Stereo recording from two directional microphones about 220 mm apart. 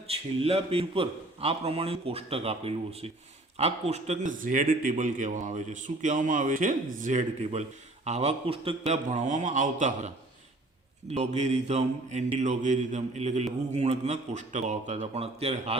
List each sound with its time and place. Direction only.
0.1 s a man's voice: 25° right (ahead or behind)
11.1 s a man's voice: 30° right (ahead or behind)